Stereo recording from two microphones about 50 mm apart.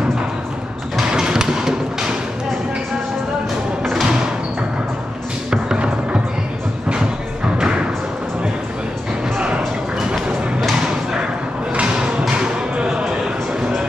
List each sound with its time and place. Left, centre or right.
0.9 s music: centre
3.9 s music: centre
5.5 s music: centre
9.9 s music: centre
11.7 s a sound: centre